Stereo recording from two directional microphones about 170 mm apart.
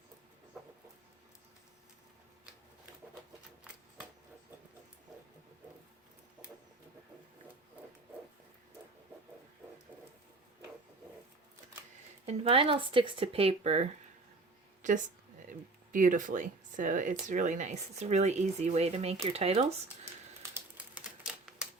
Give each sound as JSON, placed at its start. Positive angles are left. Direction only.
{"t": 12.2, "sound": "speech", "side_deg": -35}
{"t": 14.8, "sound": "speech", "side_deg": -50}
{"t": 20.4, "sound": "typewriter", "side_deg": -10}